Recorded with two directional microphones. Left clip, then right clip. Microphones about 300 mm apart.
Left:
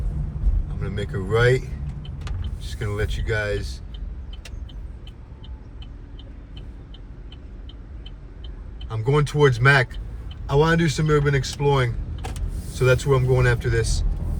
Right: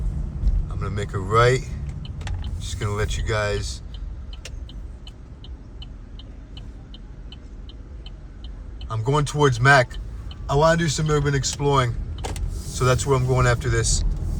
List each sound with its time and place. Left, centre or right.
0.9 s speech: centre
8.9 s speech: centre